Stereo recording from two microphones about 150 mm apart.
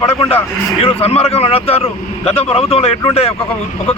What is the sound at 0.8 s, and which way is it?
Speech, 40° left (ahead or behind).